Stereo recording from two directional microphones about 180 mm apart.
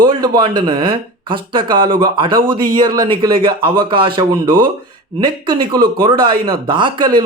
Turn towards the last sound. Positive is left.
turn(degrees=-25)  # may be behind; listen again after turning